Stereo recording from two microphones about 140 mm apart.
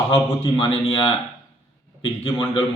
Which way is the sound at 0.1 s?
40° left (ahead or behind).